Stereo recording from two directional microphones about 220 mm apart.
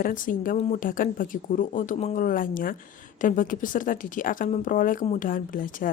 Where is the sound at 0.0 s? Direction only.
40° left (ahead or behind).